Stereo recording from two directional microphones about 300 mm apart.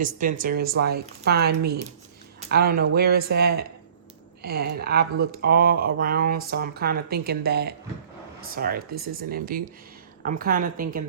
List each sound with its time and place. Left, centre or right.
0.0 s speech: right